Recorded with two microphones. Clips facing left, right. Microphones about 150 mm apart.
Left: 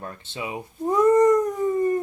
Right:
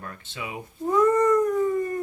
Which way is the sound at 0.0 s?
25° left (ahead or behind).